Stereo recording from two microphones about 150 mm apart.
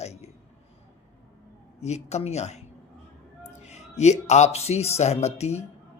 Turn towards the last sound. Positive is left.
turn(degrees=45)  # may be behind; listen again after turning